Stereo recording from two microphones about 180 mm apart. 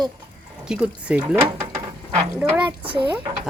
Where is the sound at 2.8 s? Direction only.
30° right (ahead or behind).